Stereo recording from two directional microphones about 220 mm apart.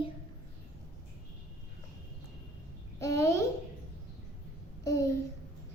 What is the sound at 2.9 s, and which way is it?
Speech, 15° left (ahead or behind).